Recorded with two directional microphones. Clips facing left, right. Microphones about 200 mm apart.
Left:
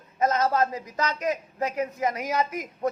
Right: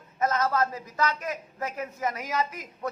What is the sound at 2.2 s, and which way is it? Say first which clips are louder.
Speech: left 3 dB; 45° left (ahead or behind).